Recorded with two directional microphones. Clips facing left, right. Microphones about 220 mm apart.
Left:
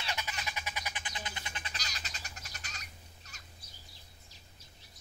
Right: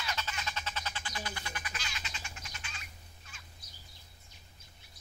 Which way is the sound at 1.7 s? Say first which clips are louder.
Right 2 dB; 40° left (ahead or behind).